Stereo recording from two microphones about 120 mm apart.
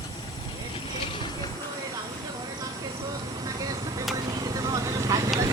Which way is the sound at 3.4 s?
30° right (ahead or behind).